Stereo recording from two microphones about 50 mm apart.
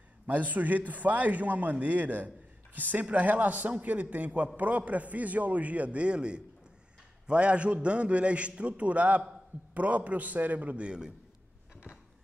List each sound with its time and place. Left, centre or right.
0.3 s a man's voice: right
10.9 s a man's voice: centre